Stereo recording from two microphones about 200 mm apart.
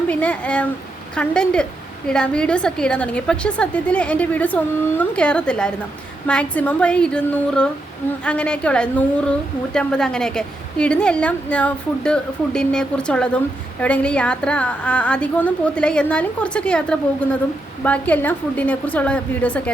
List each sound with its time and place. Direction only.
0.1 s a woman's voice: 5° left (ahead or behind)